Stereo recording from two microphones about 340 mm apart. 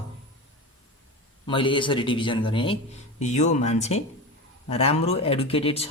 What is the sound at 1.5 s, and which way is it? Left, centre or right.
A man's voice, centre.